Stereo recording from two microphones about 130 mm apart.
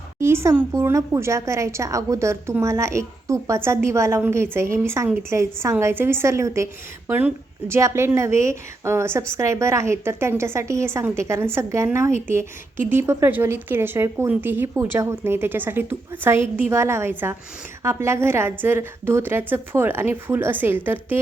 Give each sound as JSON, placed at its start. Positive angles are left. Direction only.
{"t": 0.2, "sound": "a woman's voice", "side_deg": -20}